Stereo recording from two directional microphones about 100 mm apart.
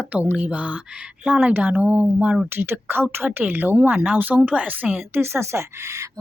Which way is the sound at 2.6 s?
20° right (ahead or behind).